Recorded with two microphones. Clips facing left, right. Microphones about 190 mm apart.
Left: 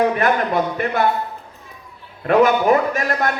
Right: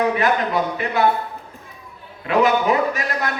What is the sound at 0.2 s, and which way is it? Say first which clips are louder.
Speech: left 1 dB; 50° left (ahead or behind).